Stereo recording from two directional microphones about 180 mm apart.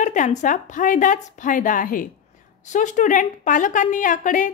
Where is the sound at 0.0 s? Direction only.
45° left (ahead or behind).